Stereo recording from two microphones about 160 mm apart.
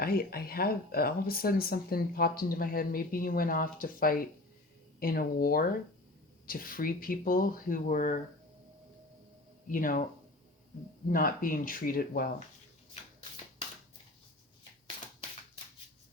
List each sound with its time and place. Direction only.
0.0 s speech: 70° left (ahead or behind)
9.6 s speech: 60° left (ahead or behind)
11.1 s speech: 60° left (ahead or behind)